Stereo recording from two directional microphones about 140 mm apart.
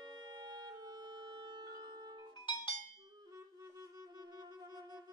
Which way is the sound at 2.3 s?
35° left (ahead or behind).